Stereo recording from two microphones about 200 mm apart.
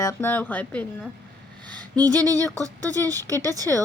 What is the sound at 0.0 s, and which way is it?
Speech, 15° left (ahead or behind).